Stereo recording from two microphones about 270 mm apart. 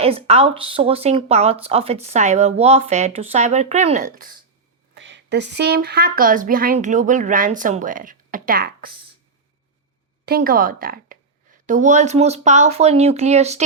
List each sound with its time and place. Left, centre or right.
0.0 s speech: right
4.9 s speech: right
10.2 s a woman's voice: right